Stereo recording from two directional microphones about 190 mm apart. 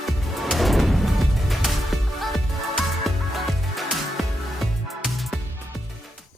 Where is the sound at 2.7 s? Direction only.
Centre (ahead or behind).